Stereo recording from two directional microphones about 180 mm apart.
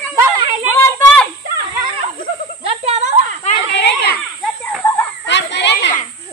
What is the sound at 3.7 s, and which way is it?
Children playing, 70° left (ahead or behind).